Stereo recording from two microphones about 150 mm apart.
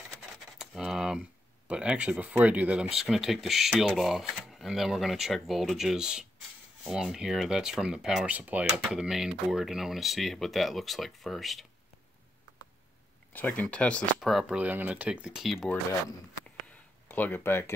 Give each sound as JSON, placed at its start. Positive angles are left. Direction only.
{"t": 0.6, "sound": "keys jangling", "side_deg": -5}
{"t": 1.7, "sound": "speech", "side_deg": -10}
{"t": 13.3, "sound": "speech", "side_deg": 10}
{"t": 17.1, "sound": "speech", "side_deg": 15}